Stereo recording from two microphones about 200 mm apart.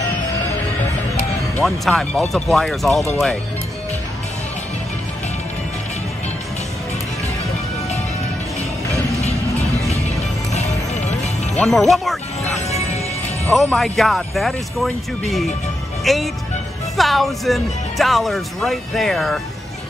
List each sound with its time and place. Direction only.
1.6 s speech: centre (ahead or behind)
10.5 s music: 35° left (ahead or behind)
11.5 s speech: centre (ahead or behind)
12.6 s music: 30° left (ahead or behind)
13.5 s speech: centre (ahead or behind)